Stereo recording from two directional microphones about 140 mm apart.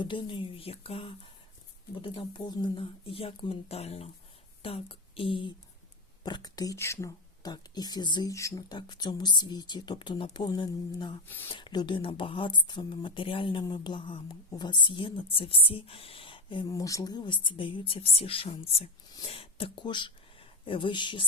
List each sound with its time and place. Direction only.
0.0 s speech: 35° left (ahead or behind)
11.3 s speech: 15° left (ahead or behind)
11.5 s speech: 30° left (ahead or behind)